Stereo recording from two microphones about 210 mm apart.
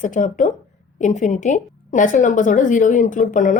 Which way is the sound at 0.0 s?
35° left (ahead or behind).